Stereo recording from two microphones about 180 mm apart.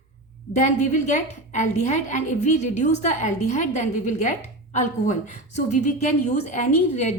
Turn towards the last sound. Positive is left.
turn(degrees=40)  # may be behind; listen again after turning